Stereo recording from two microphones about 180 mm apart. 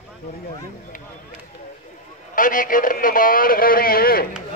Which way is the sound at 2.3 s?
50° left (ahead or behind).